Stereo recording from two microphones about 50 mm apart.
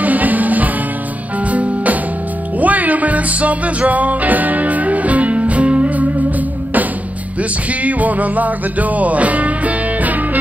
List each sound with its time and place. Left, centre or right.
0.0 s music: right
7.8 s music: right